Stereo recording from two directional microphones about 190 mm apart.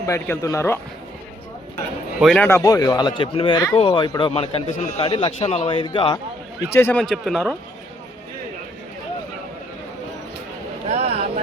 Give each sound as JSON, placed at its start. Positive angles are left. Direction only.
{"t": 0.0, "sound": "speech", "side_deg": 15}
{"t": 2.1, "sound": "speech", "side_deg": 5}
{"t": 2.6, "sound": "a man's voice", "side_deg": 20}
{"t": 7.0, "sound": "speech", "side_deg": 0}
{"t": 10.8, "sound": "a sound", "side_deg": -35}